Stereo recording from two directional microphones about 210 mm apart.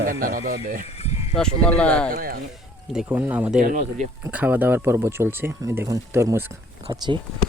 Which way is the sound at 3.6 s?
35° right (ahead or behind).